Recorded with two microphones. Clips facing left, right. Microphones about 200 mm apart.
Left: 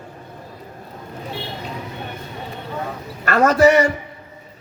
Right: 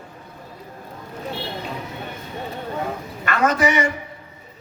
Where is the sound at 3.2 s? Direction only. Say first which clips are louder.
Left 6 dB; 40° left (ahead or behind).